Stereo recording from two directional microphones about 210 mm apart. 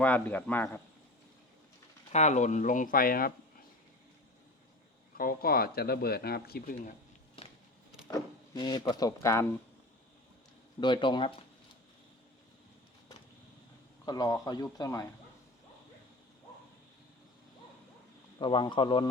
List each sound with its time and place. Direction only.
0.0 s speech: 10° left (ahead or behind)
2.1 s speech: 35° left (ahead or behind)
5.1 s speech: 45° left (ahead or behind)
7.4 s a sound: 25° left (ahead or behind)
8.0 s speech: 20° left (ahead or behind)
10.8 s speech: 20° left (ahead or behind)
14.0 s speech: 20° left (ahead or behind)
18.3 s speech: 20° left (ahead or behind)